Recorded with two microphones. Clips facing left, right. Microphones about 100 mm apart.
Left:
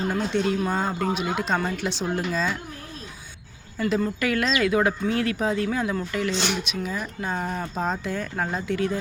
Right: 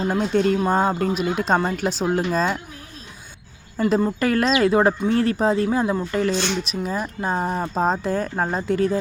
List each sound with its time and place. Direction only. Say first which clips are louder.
0.1 s speech: right 7 dB; 40° right (ahead or behind)
3.8 s speech: right 4 dB; 40° right (ahead or behind)
6.3 s speech: right 3 dB; 15° left (ahead or behind)
6.7 s speech: right 4 dB; 35° right (ahead or behind)